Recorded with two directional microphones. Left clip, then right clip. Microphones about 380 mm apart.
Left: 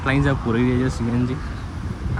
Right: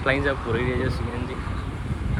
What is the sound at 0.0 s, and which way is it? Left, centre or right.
Speech, centre.